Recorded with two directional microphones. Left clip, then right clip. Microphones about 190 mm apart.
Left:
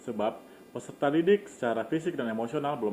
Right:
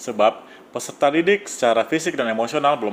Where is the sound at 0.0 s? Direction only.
30° right (ahead or behind).